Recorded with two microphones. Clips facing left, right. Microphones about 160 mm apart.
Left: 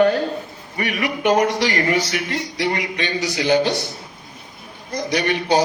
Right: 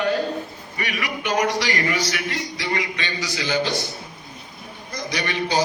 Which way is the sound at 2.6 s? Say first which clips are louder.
Left 5 dB; 60° left (ahead or behind).